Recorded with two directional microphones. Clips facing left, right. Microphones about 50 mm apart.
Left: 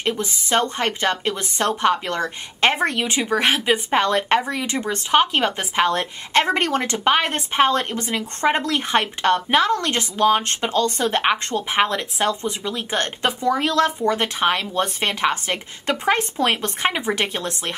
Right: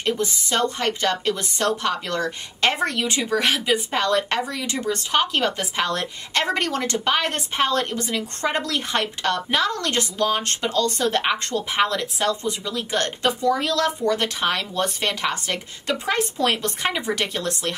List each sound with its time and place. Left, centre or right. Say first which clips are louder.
0.0 s a woman's voice: even; left